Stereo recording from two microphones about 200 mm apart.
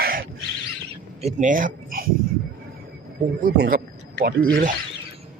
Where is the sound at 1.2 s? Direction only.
35° right (ahead or behind).